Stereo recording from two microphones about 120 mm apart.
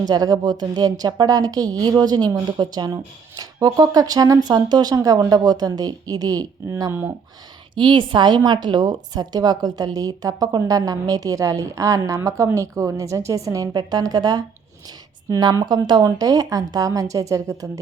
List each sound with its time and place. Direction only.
0.0 s a woman's voice: 35° right (ahead or behind)
7.8 s a woman's voice: 40° right (ahead or behind); by 17.7 s 25° right (ahead or behind)